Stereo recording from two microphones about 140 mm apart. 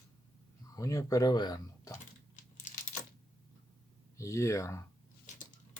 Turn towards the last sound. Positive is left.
turn(degrees=20)  # may be behind; listen again after turning